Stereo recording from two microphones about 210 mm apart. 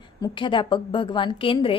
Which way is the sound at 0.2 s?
20° left (ahead or behind).